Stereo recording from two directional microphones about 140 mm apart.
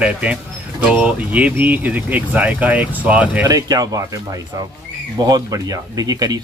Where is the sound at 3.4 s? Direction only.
25° right (ahead or behind).